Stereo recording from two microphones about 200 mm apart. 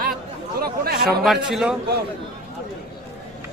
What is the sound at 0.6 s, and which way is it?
Speech, 50° right (ahead or behind).